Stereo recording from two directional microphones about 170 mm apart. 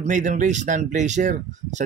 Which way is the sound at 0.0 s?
45° right (ahead or behind).